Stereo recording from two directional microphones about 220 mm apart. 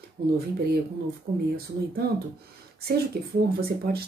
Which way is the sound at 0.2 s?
45° right (ahead or behind).